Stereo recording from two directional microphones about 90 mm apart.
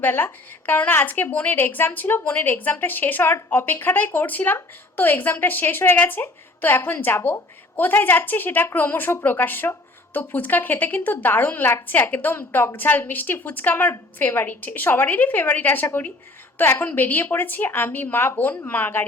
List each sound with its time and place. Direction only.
0.0 s a woman's voice: 20° left (ahead or behind)